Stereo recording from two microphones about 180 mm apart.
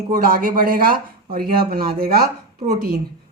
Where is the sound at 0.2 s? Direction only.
55° right (ahead or behind).